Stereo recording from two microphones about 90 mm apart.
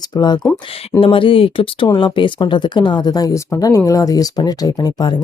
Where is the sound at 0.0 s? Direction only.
55° left (ahead or behind).